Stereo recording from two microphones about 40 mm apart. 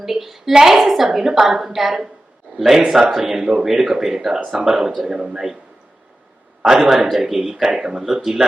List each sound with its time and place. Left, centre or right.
0.0 s a sound: centre
0.5 s a woman's voice: centre
6.6 s a woman's voice: centre